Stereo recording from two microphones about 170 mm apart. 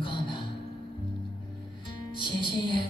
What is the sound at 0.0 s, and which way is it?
Music, 30° left (ahead or behind).